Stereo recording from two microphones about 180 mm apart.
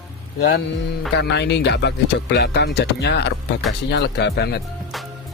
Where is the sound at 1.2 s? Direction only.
70° left (ahead or behind).